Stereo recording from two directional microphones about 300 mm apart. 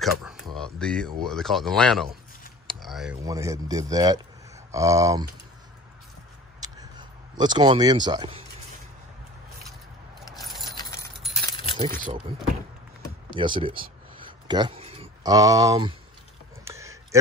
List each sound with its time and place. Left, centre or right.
0.0 s a man's voice: centre
6.6 s a sound: centre
10.3 s keys jangling: centre
10.6 s coin: centre
11.5 s keys jangling: centre
13.3 s a sound: centre